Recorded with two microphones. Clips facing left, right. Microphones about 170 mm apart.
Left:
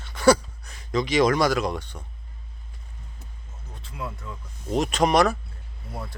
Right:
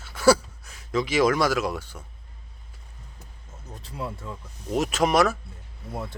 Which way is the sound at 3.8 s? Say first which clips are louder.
Right 1 dB; 35° right (ahead or behind).